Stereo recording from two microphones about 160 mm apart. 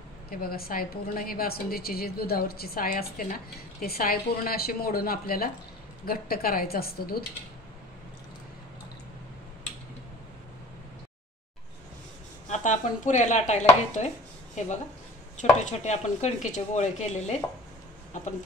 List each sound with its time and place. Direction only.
0.3 s a woman's voice: 70° left (ahead or behind)
12.4 s speech: 50° left (ahead or behind)
15.6 s speech: 45° left (ahead or behind)